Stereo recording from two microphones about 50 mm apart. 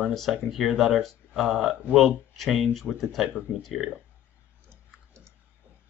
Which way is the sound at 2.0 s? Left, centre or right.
Centre.